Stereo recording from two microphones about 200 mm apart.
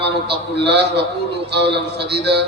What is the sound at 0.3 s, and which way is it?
A man's voice, 55° right (ahead or behind).